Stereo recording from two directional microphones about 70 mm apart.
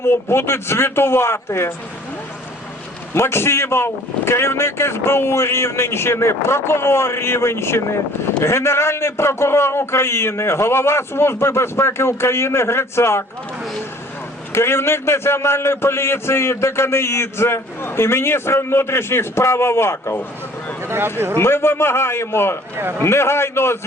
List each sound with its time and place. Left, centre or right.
0.0 s a man's voice: left
3.2 s a man's voice: left
14.5 s a man's voice: left
20.8 s speech: right
21.3 s a man's voice: left